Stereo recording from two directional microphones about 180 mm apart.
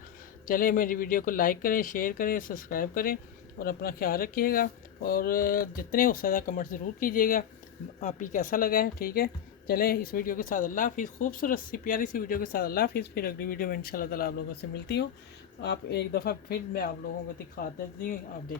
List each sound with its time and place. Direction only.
0.4 s a woman's voice: 50° left (ahead or behind)
14.6 s a woman's voice: 65° left (ahead or behind)